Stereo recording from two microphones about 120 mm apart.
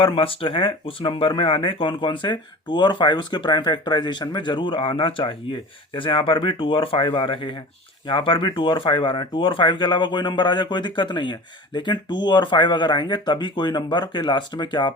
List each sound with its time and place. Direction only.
0.0 s speech: 50° left (ahead or behind)